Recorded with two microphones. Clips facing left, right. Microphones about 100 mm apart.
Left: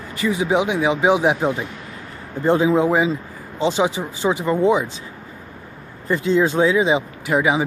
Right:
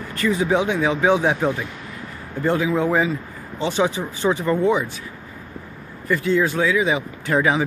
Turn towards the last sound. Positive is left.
turn(degrees=15)  # may be behind; listen again after turning